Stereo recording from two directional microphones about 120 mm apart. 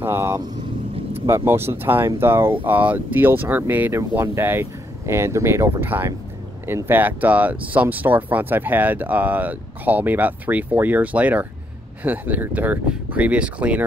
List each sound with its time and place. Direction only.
0.0 s speech: 20° right (ahead or behind)